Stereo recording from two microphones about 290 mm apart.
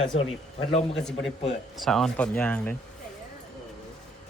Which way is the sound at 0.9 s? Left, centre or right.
Centre.